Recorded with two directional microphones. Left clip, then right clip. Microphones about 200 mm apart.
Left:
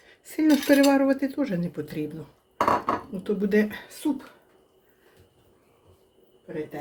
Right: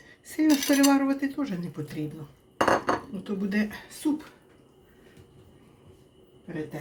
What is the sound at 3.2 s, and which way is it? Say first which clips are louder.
Speech: left 8 dB; 55° left (ahead or behind).